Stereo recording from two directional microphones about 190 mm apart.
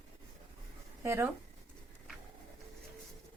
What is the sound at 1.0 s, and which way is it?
Speech, 15° right (ahead or behind).